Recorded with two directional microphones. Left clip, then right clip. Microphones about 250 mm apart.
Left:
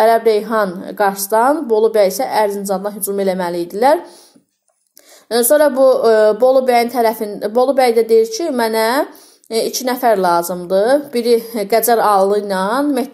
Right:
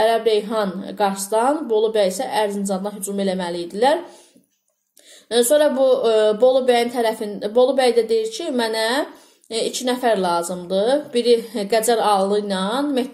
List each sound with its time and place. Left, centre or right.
0.0 s a woman's voice: left
5.3 s a woman's voice: left